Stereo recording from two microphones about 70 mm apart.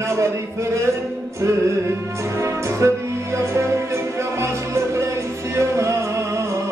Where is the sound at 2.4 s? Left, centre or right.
Right.